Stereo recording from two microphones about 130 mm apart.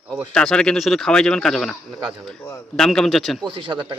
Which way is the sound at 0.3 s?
5° left (ahead or behind).